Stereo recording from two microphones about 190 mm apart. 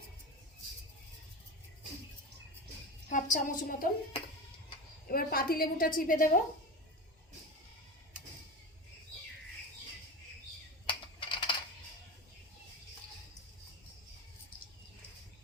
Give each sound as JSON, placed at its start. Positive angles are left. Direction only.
{"t": 3.1, "sound": "a woman's voice", "side_deg": 40}
{"t": 5.0, "sound": "a woman's voice", "side_deg": 50}
{"t": 10.8, "sound": "typing", "side_deg": 25}